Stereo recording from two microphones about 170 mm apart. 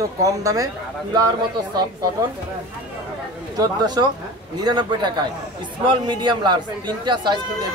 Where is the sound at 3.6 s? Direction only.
25° right (ahead or behind).